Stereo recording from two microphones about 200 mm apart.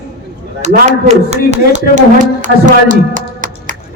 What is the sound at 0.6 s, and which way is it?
Speech, 35° right (ahead or behind).